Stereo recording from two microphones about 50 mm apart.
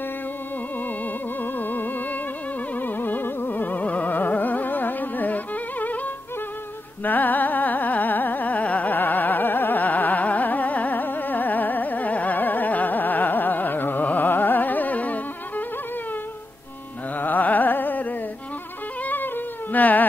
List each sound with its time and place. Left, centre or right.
0.8 s music: left
7.0 s carnatic music: left
17.1 s carnatic music: left
19.0 s cat: left